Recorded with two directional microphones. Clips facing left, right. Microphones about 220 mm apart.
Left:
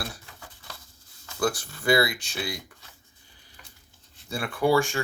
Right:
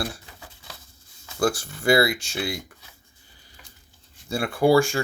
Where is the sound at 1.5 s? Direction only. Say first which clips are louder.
Right 3 dB; 25° right (ahead or behind).